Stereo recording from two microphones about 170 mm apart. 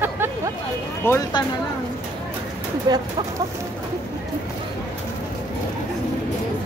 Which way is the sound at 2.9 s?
25° right (ahead or behind).